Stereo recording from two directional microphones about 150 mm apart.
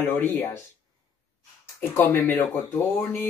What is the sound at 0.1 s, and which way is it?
Speech, 15° left (ahead or behind).